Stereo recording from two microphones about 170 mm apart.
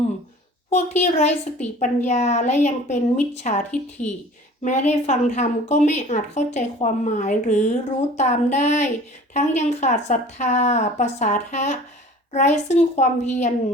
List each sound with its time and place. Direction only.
0.7 s a woman's voice: 40° left (ahead or behind)